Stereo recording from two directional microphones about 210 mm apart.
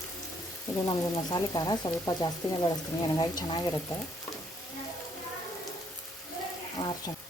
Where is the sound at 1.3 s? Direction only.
20° left (ahead or behind).